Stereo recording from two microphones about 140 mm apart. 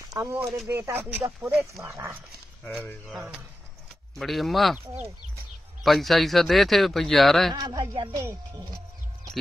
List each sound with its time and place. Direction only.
0.1 s speech: 20° right (ahead or behind)
1.9 s speech: 20° right (ahead or behind)
2.6 s speech: centre (ahead or behind)
5.9 s speech: centre (ahead or behind)
7.5 s speech: 30° right (ahead or behind)
8.2 s speech: 20° right (ahead or behind)